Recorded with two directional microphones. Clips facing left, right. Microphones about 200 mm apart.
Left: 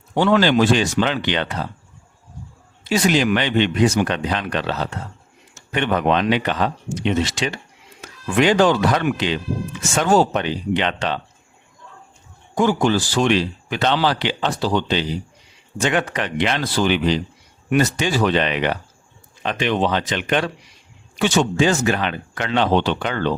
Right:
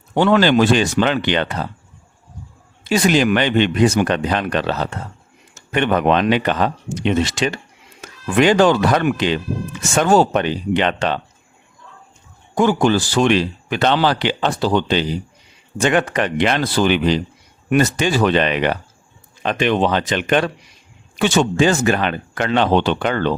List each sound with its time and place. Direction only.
0.1 s a man's voice: 55° right (ahead or behind)
2.9 s a man's voice: 50° right (ahead or behind)
12.5 s a man's voice: 60° right (ahead or behind)